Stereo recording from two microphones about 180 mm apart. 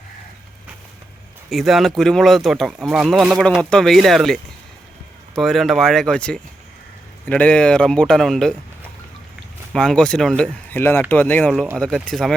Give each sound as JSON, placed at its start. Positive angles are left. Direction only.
{"t": 1.5, "sound": "speech", "side_deg": 0}
{"t": 9.7, "sound": "speech", "side_deg": 5}